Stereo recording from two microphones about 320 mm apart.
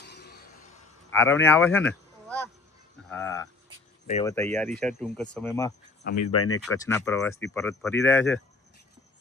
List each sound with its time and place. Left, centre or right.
0.0 s a sound: left
1.1 s speech: centre
6.1 s speech: left
6.6 s speech: centre